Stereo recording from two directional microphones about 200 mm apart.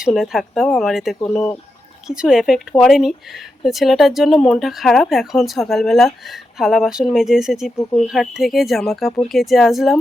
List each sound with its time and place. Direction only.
0.0 s speech: centre (ahead or behind)